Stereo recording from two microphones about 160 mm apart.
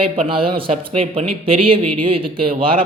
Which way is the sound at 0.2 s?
30° right (ahead or behind).